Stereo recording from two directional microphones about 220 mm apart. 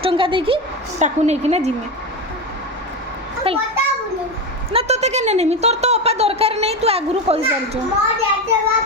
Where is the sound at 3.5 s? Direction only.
25° right (ahead or behind).